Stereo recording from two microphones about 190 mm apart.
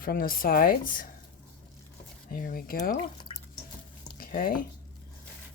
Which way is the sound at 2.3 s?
50° left (ahead or behind).